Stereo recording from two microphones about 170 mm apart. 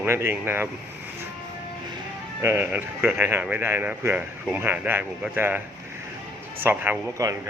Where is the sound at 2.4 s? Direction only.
15° right (ahead or behind).